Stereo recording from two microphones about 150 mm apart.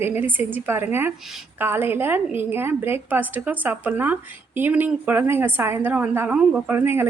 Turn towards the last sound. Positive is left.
turn(degrees=-15)  # may be behind; listen again after turning